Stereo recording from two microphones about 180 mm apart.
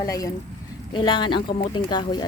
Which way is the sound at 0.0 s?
20° left (ahead or behind).